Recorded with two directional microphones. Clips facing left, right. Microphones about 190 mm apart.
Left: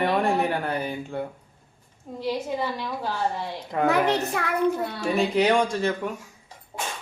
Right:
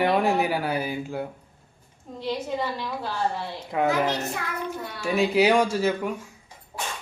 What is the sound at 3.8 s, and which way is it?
Speech, 65° left (ahead or behind).